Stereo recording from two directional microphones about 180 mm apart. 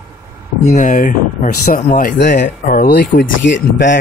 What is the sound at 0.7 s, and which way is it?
Speech, 45° left (ahead or behind).